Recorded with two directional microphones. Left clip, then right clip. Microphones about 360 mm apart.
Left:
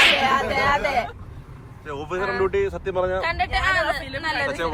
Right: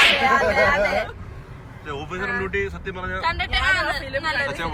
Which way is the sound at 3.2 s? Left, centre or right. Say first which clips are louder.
Right 1 dB; centre.